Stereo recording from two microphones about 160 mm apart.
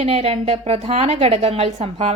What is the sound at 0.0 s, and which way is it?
A woman's voice, 40° right (ahead or behind).